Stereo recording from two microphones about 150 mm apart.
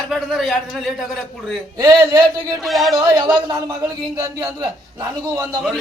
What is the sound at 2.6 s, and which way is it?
Speech, centre (ahead or behind).